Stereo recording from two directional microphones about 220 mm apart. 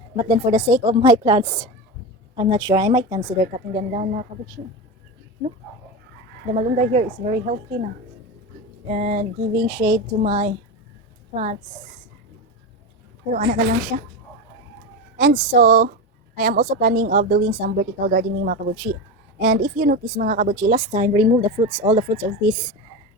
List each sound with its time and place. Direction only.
0.2 s a woman's voice: 20° right (ahead or behind)
6.5 s a woman's voice: 30° right (ahead or behind)
8.9 s a woman's voice: 35° right (ahead or behind)
9.5 s speech: 50° right (ahead or behind)
10.2 s a woman's voice: 30° right (ahead or behind)
13.3 s a woman's voice: 40° right (ahead or behind)
15.2 s a woman's voice: 40° right (ahead or behind); by 22.0 s 25° right (ahead or behind)